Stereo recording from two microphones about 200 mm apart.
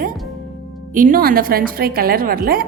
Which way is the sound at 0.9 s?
45° right (ahead or behind).